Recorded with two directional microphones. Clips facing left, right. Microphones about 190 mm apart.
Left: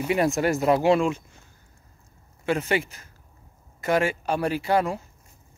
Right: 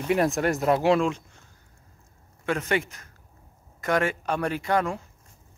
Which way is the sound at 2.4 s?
30° left (ahead or behind).